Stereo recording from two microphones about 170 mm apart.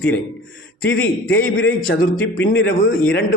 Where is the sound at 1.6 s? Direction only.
60° left (ahead or behind).